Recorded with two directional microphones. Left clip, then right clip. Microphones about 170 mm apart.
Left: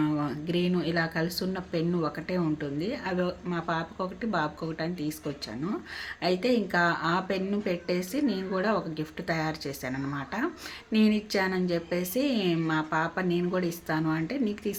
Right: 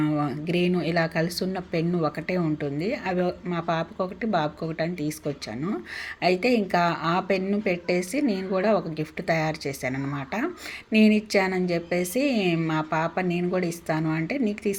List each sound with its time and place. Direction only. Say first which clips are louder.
0.0 s speech: right 3 dB; 20° right (ahead or behind)
6.2 s speech: right 4 dB; 25° right (ahead or behind)